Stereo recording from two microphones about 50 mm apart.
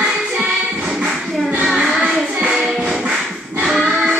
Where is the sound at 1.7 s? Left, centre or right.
Centre.